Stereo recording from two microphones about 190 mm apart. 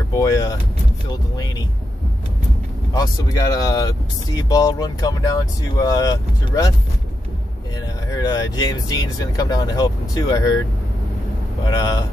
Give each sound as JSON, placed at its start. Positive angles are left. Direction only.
{"t": 0.1, "sound": "vehicle", "side_deg": 15}
{"t": 2.9, "sound": "speech", "side_deg": 20}
{"t": 8.1, "sound": "speech", "side_deg": 20}
{"t": 11.6, "sound": "speech", "side_deg": 20}